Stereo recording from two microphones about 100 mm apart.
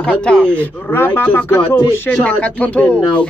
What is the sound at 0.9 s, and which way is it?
Speech, 20° left (ahead or behind).